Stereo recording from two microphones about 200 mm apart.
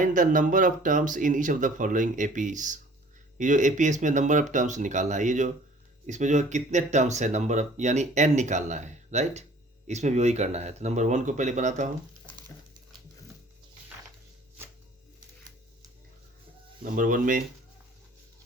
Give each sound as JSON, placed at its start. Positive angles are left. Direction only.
{"t": 0.0, "sound": "speech", "side_deg": -40}
{"t": 16.8, "sound": "speech", "side_deg": -40}